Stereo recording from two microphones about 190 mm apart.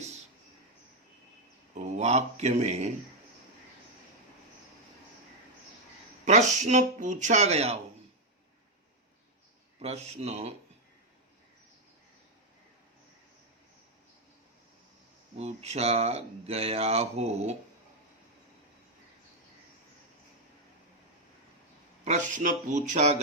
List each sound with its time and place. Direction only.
1.7 s speech: 40° right (ahead or behind)
6.2 s speech: 40° right (ahead or behind)
9.8 s speech: 35° right (ahead or behind)
15.4 s speech: 35° right (ahead or behind)
22.0 s speech: 40° right (ahead or behind)